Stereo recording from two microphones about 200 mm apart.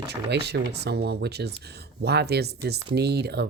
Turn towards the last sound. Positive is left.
turn(degrees=-55)  # may be behind; listen again after turning